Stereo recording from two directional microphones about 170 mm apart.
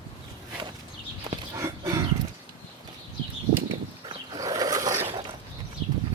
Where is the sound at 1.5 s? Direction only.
20° right (ahead or behind).